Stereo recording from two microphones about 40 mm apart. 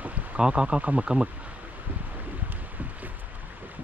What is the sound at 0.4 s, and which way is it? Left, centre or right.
Speech, right.